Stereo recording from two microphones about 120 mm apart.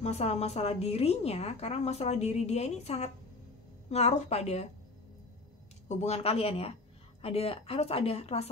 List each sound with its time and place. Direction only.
0.0 s a woman's voice: 65° left (ahead or behind)
5.9 s a woman's voice: 70° left (ahead or behind)